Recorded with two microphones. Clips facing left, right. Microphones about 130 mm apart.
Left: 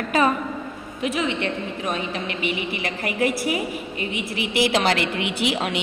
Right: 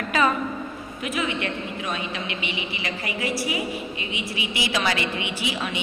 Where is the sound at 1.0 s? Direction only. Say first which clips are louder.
Left 3 dB; 30° left (ahead or behind).